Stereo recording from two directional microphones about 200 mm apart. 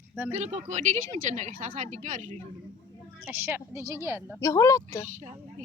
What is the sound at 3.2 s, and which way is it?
A woman's voice, 10° right (ahead or behind).